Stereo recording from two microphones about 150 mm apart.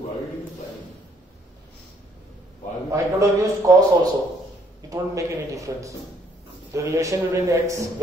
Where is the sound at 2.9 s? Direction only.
20° right (ahead or behind).